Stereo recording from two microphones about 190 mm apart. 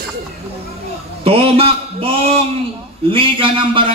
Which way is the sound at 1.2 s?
30° right (ahead or behind).